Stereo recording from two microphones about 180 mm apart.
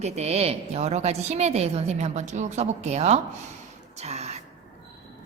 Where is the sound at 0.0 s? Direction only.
35° right (ahead or behind).